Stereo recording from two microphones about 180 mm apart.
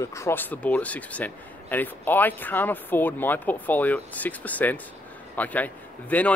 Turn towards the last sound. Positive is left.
turn(degrees=10)  # may be behind; listen again after turning